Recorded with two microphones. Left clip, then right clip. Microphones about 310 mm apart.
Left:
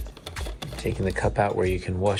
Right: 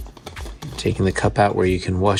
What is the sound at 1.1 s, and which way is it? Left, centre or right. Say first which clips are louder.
Speech: right 4 dB; right.